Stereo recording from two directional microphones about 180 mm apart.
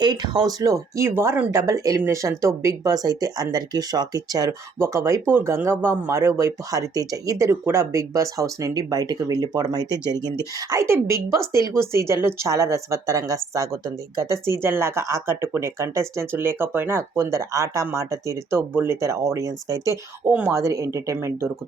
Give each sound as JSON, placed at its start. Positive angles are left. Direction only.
{"t": 0.0, "sound": "speech", "side_deg": -25}